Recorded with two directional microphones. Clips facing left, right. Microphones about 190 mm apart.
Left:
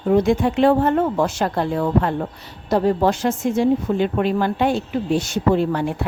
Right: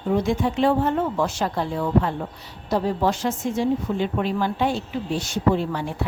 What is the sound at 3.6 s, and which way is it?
Speech, 60° left (ahead or behind).